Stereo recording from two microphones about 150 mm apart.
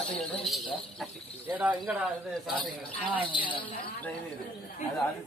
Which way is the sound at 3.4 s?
35° left (ahead or behind).